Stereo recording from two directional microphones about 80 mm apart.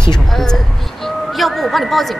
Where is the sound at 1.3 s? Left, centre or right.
Centre.